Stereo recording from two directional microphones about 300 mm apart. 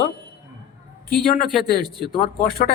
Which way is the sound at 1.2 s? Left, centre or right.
Left.